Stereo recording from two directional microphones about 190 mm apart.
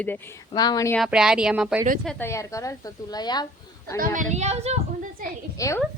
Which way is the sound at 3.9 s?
45° right (ahead or behind).